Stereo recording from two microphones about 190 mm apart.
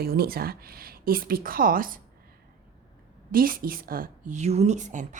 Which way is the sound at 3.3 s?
50° right (ahead or behind).